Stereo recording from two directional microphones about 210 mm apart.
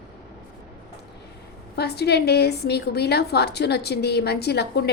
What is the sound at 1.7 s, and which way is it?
A woman's voice, 50° left (ahead or behind).